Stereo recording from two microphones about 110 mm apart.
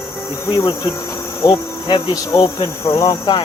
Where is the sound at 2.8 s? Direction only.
30° left (ahead or behind).